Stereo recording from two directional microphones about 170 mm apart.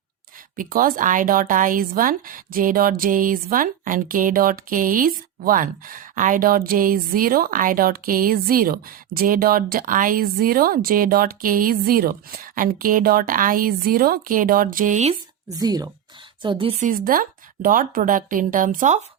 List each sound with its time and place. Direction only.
0.5 s speech: 55° right (ahead or behind)
15.5 s speech: 20° right (ahead or behind)
16.8 s a woman's voice: 55° right (ahead or behind)